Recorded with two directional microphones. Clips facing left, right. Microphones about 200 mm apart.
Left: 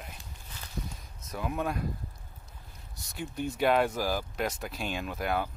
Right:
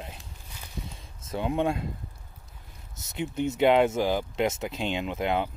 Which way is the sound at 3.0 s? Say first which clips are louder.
Right 6 dB; 20° right (ahead or behind).